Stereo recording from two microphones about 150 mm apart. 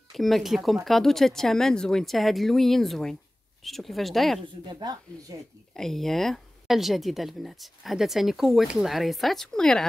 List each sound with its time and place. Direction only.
0.1 s speech: centre (ahead or behind)
4.6 s speech: 30° right (ahead or behind)
5.8 s speech: centre (ahead or behind)